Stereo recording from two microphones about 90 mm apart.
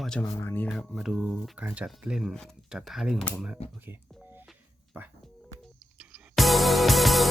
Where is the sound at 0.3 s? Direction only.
25° left (ahead or behind).